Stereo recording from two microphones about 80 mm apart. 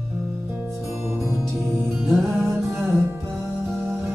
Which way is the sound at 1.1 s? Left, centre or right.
Right.